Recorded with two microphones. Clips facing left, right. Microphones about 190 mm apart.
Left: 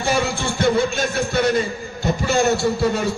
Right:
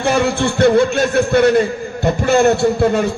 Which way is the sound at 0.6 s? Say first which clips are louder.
Right 6 dB; 65° right (ahead or behind).